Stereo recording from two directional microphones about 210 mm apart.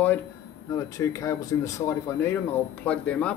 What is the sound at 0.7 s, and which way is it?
Speech, 15° left (ahead or behind).